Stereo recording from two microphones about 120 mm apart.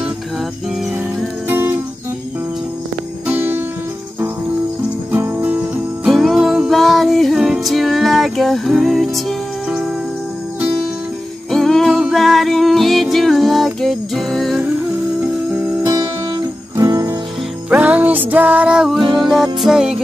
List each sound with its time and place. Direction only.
1.5 s music: 20° right (ahead or behind)
3.3 s music: 15° right (ahead or behind)
5.1 s music: 20° right (ahead or behind)
6.0 s music: centre (ahead or behind)
11.5 s music: 5° left (ahead or behind)
15.8 s music: 35° right (ahead or behind)
17.6 s music: 10° right (ahead or behind)